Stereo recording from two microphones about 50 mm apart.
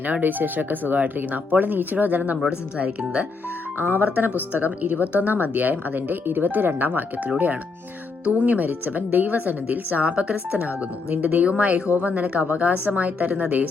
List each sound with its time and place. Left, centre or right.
0.0 s speech: right
2.5 s speech: right
3.8 s speech: right